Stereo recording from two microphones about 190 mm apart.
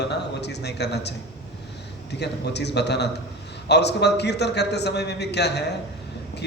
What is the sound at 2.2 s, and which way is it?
A man's voice, 60° left (ahead or behind).